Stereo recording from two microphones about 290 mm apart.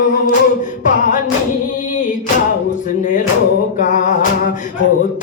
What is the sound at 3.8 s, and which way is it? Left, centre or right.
Music, left.